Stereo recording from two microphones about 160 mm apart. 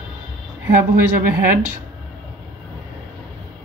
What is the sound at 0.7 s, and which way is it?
Speech, 60° right (ahead or behind).